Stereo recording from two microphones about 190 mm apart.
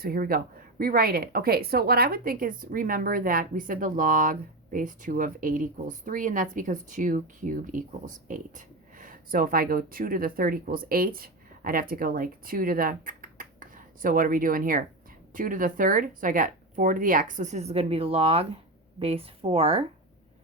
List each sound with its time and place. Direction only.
0.0 s speech: 50° right (ahead or behind); by 19.8 s 30° right (ahead or behind)